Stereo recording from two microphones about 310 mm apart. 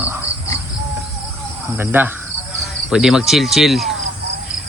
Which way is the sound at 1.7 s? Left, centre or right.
Centre.